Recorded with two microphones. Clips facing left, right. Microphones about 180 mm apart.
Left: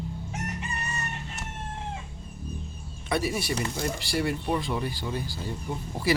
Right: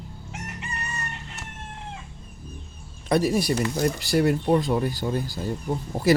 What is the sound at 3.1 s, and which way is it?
Speech, 40° right (ahead or behind).